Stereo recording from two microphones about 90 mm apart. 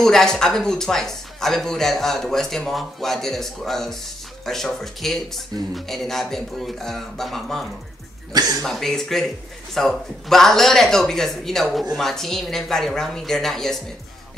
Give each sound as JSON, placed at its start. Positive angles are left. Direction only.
{"t": 0.0, "sound": "speech", "side_deg": 5}
{"t": 8.3, "sound": "speech", "side_deg": -45}
{"t": 8.6, "sound": "speech", "side_deg": 5}